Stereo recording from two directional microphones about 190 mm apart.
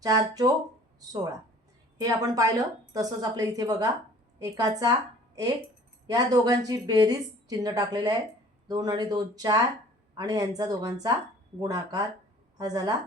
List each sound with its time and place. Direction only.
0.0 s a woman's voice: 20° right (ahead or behind)